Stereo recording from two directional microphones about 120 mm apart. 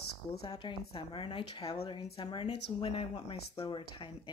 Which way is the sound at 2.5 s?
55° left (ahead or behind).